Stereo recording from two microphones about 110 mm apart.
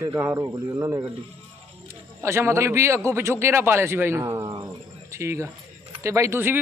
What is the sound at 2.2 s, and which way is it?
A man's voice, 25° right (ahead or behind).